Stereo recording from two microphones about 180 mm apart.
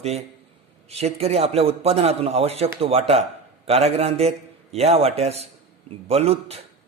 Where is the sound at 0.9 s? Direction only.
35° right (ahead or behind).